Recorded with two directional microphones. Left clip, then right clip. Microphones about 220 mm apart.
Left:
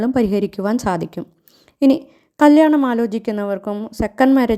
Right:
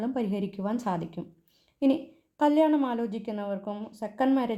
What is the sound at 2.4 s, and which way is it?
A woman's voice, 40° left (ahead or behind).